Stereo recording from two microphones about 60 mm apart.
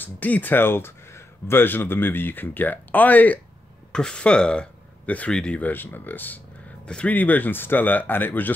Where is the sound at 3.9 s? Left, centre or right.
Centre.